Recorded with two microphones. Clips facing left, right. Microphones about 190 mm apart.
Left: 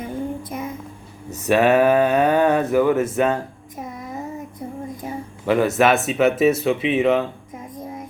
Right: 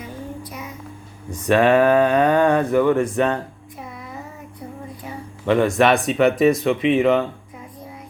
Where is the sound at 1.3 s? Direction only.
10° left (ahead or behind).